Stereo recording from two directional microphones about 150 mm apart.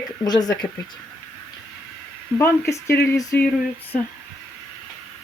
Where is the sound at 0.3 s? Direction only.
25° left (ahead or behind).